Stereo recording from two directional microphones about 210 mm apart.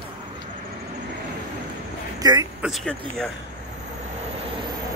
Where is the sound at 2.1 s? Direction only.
20° right (ahead or behind).